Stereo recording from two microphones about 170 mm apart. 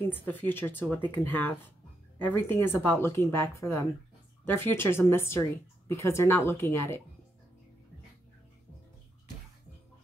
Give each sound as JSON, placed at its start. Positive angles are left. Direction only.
{"t": 0.3, "sound": "speech", "side_deg": 10}